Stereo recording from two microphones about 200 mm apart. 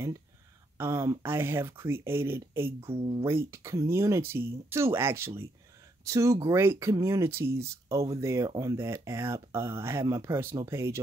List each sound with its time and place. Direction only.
0.7 s speech: 15° right (ahead or behind)
2.9 s speech: 25° right (ahead or behind)
3.3 s speech: 15° right (ahead or behind)